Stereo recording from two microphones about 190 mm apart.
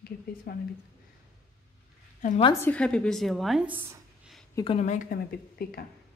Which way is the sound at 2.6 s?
5° left (ahead or behind).